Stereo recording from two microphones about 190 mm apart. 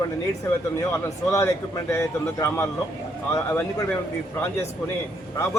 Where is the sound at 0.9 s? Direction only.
15° left (ahead or behind).